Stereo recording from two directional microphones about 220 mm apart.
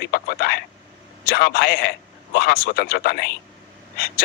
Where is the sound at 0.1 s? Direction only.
45° left (ahead or behind).